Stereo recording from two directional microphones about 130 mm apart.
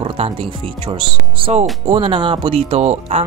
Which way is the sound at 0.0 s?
45° right (ahead or behind).